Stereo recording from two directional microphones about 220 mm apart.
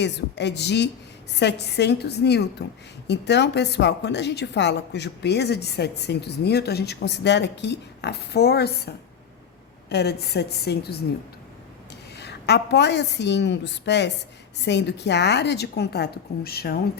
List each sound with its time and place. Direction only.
0.0 s a woman's voice: 50° left (ahead or behind)
9.9 s a woman's voice: 50° left (ahead or behind)
12.1 s a woman's voice: 50° left (ahead or behind)